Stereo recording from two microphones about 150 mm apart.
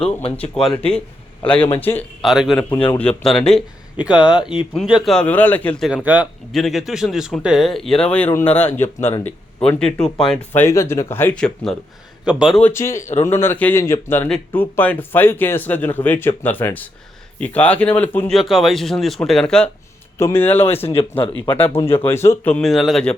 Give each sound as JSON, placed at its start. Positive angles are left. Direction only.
{"t": 0.0, "sound": "speech", "side_deg": 35}
{"t": 0.8, "sound": "speech", "side_deg": 5}
{"t": 2.2, "sound": "speech", "side_deg": 0}
{"t": 2.6, "sound": "speech", "side_deg": 35}
{"t": 2.9, "sound": "speech", "side_deg": 10}
{"t": 3.9, "sound": "speech", "side_deg": -10}
{"t": 12.6, "sound": "speech", "side_deg": 15}
{"t": 18.3, "sound": "speech", "side_deg": 0}
{"t": 20.1, "sound": "speech", "side_deg": 15}